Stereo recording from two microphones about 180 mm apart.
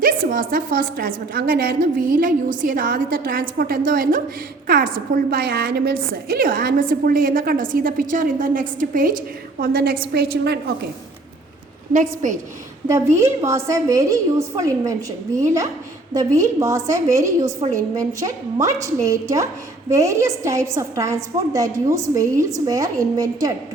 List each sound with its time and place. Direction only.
0.0 s a woman's voice: 50° right (ahead or behind); by 10.6 s 65° right (ahead or behind)
11.9 s a woman's voice: 45° right (ahead or behind)
12.9 s a woman's voice: 15° right (ahead or behind)